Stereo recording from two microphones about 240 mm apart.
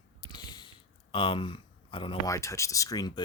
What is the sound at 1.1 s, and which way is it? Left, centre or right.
Speech, left.